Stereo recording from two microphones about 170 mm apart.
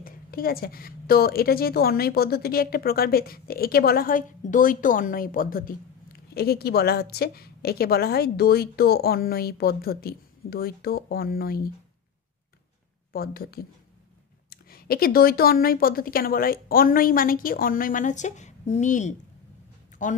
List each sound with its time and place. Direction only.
0.0 s a woman's voice: 60° left (ahead or behind)
13.1 s a woman's voice: 60° left (ahead or behind)